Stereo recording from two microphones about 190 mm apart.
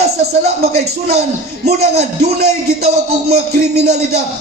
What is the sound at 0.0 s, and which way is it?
Speech, 55° right (ahead or behind).